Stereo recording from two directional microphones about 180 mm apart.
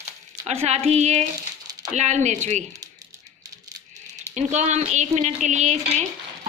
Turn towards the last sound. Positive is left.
turn(degrees=-40)  # may be behind; listen again after turning